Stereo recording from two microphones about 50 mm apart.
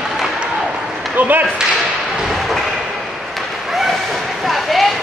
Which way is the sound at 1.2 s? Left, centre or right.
Right.